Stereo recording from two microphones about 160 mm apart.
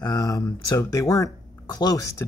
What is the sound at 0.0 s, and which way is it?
Speech, 25° left (ahead or behind).